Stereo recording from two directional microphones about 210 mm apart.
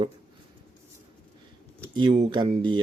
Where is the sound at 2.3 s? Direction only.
20° right (ahead or behind).